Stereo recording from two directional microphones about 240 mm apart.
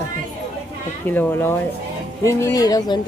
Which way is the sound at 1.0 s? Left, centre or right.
Centre.